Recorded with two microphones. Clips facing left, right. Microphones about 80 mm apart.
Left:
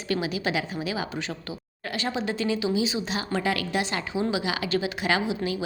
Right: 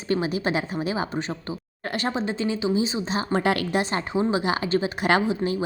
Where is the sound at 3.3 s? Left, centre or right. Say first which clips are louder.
Right 5 dB; right.